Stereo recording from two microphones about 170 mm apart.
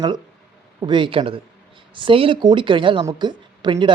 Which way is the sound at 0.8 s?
25° right (ahead or behind).